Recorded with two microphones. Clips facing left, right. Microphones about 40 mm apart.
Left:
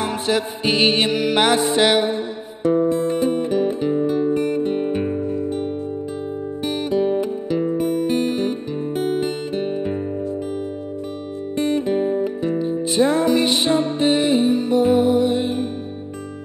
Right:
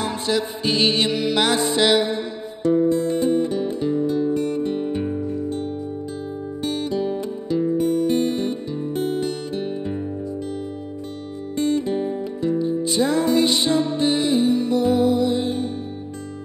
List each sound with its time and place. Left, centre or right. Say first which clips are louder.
0.0 s music: left 2 dB; left
6.6 s music: left 3 dB; left
7.7 s music: right 2 dB; left
11.5 s music: left 1 dB; left